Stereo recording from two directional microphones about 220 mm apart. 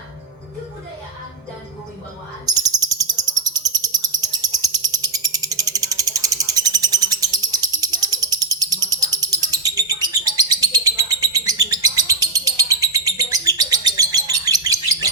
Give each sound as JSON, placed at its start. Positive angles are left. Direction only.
{"t": 2.5, "sound": "bird", "side_deg": -15}